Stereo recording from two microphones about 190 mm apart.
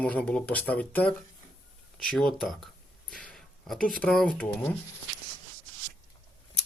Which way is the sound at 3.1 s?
5° left (ahead or behind).